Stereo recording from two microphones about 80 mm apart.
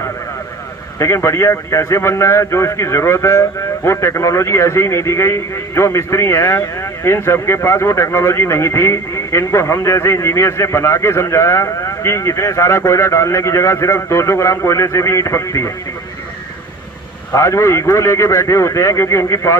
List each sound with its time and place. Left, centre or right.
0.9 s a man's voice: left
17.3 s a man's voice: left